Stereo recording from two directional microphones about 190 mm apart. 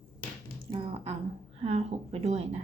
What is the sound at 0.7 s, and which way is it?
A woman's voice, 30° right (ahead or behind).